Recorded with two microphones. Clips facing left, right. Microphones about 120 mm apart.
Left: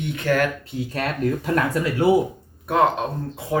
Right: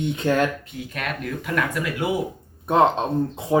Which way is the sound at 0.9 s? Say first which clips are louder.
Left 6 dB; 35° left (ahead or behind).